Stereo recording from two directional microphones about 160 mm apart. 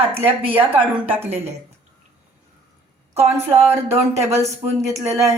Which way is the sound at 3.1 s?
40° right (ahead or behind).